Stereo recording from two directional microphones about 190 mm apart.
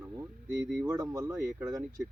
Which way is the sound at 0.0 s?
15° right (ahead or behind).